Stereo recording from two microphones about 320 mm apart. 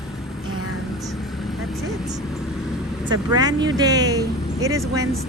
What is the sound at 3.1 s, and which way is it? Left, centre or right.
Speech, centre.